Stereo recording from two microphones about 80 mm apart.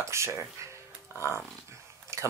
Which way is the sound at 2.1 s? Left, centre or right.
Right.